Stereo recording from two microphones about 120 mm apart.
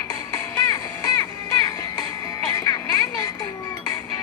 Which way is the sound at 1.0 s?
30° left (ahead or behind).